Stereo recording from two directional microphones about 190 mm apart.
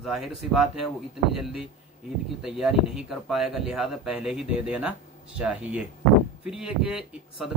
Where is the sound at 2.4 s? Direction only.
5° right (ahead or behind).